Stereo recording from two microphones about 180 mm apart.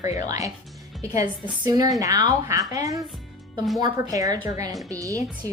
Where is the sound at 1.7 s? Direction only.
20° right (ahead or behind).